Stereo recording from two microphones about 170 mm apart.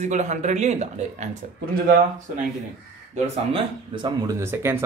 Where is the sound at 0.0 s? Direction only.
45° right (ahead or behind).